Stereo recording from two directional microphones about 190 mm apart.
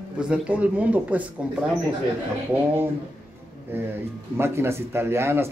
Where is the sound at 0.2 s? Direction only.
5° right (ahead or behind).